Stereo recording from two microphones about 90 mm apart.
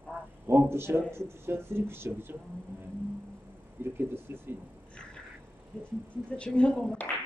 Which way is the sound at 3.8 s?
25° right (ahead or behind).